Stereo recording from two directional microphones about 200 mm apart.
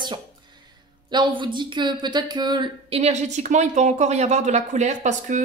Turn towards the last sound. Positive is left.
turn(degrees=-35)  # may be behind; listen again after turning